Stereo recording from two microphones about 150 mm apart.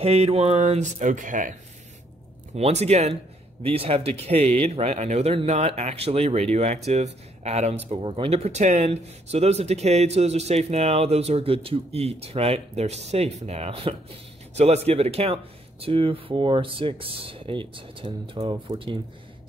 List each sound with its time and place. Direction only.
0.0 s speech: 40° right (ahead or behind); by 1.5 s 60° right (ahead or behind)
2.5 s speech: 45° right (ahead or behind)